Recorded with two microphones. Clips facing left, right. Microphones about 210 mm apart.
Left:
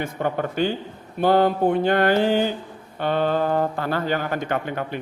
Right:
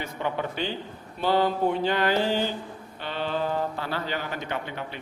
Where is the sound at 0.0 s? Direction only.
50° left (ahead or behind).